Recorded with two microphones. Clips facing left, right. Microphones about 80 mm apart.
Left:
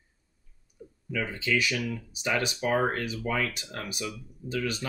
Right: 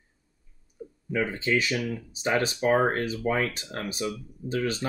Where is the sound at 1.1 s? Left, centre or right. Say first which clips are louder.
Right 3 dB; right.